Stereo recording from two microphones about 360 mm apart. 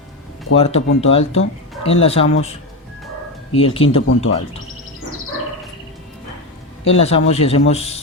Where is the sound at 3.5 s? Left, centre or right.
Centre.